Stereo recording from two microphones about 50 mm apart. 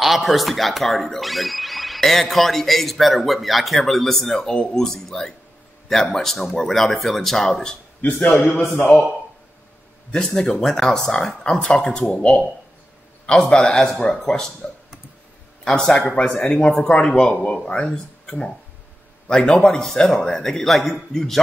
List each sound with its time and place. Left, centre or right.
0.0 s a man's voice: centre
8.5 s a man's voice: left
10.2 s a man's voice: centre
12.1 s a man's voice: left
15.6 s speech: centre
16.4 s speech: left
18.2 s a sound: centre
19.2 s a man's voice: centre